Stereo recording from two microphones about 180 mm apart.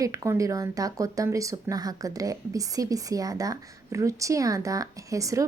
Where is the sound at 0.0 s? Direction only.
20° right (ahead or behind).